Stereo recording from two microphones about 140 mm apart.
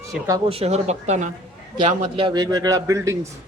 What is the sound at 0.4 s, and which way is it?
Speech, 45° right (ahead or behind).